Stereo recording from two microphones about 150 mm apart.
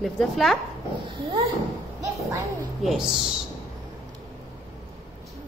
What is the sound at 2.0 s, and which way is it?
Music, 20° right (ahead or behind).